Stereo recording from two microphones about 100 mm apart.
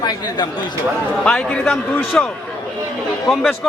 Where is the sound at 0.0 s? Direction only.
45° left (ahead or behind).